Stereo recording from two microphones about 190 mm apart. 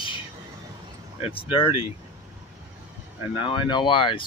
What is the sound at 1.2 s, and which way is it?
Speech, 30° left (ahead or behind).